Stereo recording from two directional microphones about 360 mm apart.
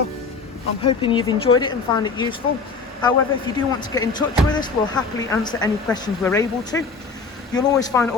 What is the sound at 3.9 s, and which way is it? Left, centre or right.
Speech, centre.